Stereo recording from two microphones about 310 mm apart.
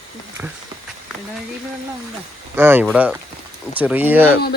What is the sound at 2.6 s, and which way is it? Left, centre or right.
A man's voice, centre.